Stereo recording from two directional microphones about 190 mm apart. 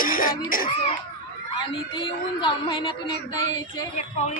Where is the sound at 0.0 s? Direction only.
45° left (ahead or behind).